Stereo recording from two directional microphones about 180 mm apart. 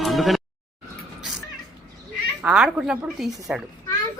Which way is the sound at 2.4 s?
5° right (ahead or behind).